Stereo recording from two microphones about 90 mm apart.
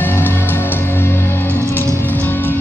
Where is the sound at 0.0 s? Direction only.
25° left (ahead or behind).